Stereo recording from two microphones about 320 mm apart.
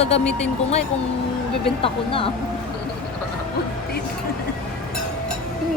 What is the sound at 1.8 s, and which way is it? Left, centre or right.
Speech, centre.